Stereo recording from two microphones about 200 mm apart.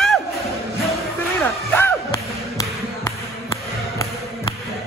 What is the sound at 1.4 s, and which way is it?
Music, 10° left (ahead or behind).